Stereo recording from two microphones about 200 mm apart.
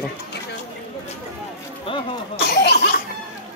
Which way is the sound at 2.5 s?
55° left (ahead or behind).